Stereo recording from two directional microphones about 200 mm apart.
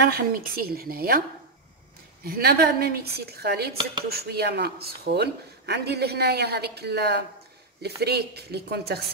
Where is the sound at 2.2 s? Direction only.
50° right (ahead or behind).